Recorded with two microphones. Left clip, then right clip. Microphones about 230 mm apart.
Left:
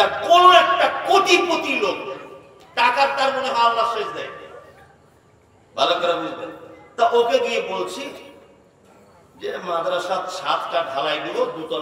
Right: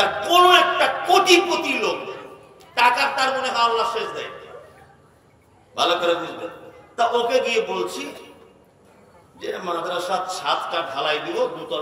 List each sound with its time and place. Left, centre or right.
0.0 s a sound: right
2.7 s a man's voice: right
5.8 s a man's voice: right
9.4 s a man's voice: right